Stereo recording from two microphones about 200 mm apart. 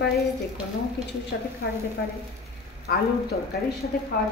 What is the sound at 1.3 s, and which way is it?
Speech, 55° left (ahead or behind).